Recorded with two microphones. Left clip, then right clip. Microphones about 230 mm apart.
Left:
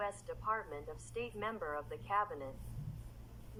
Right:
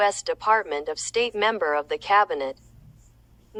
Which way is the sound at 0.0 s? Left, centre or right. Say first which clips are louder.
Right 18 dB; right.